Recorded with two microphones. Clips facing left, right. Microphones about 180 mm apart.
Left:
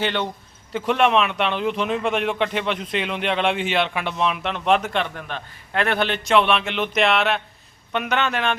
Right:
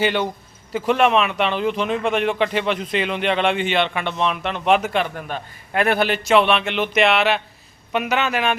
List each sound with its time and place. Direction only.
0.0 s a man's voice: 5° right (ahead or behind)